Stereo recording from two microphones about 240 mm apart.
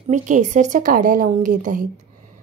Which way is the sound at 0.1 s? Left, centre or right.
Right.